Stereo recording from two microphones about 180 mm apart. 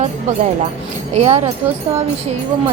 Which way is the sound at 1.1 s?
40° right (ahead or behind).